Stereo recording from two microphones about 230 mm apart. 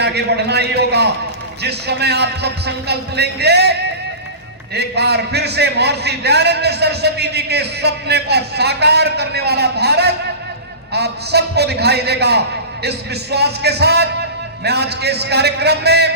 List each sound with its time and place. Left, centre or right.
0.0 s a man's voice: right